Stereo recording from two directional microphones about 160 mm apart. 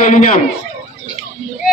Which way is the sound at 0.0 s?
55° left (ahead or behind).